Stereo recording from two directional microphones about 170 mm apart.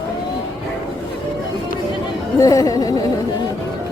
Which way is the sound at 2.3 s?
20° left (ahead or behind).